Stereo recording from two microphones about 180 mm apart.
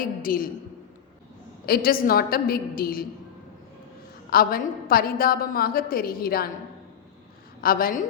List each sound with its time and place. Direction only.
0.0 s a woman's voice: 50° left (ahead or behind)
1.6 s a woman's voice: 55° left (ahead or behind)
4.3 s a woman's voice: 55° left (ahead or behind)
7.6 s a woman's voice: 55° left (ahead or behind)